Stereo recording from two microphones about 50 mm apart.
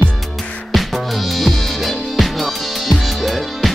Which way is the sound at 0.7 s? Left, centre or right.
Centre.